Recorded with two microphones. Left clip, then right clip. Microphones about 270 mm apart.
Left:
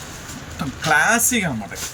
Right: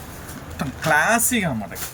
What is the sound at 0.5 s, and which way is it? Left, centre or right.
Speech, centre.